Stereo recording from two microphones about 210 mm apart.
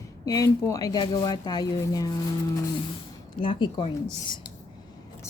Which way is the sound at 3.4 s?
25° left (ahead or behind).